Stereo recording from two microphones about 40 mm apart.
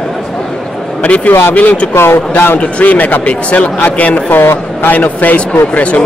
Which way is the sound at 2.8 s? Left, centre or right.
Left.